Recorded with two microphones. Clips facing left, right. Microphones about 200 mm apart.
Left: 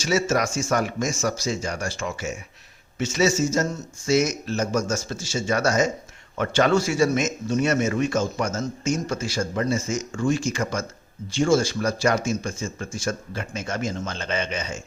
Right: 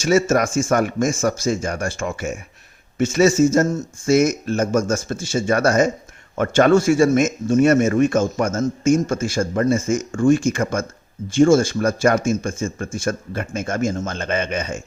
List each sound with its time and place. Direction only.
0.0 s speech: 50° right (ahead or behind)